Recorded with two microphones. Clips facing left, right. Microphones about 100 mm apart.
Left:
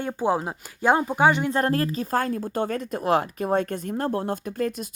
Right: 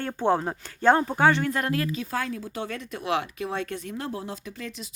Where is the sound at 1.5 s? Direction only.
35° left (ahead or behind).